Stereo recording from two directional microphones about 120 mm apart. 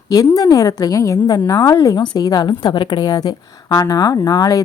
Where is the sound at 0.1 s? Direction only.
30° left (ahead or behind).